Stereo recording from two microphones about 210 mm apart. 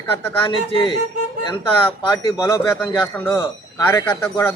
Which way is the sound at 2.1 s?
15° left (ahead or behind).